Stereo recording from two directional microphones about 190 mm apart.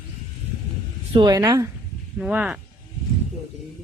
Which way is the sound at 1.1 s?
20° right (ahead or behind).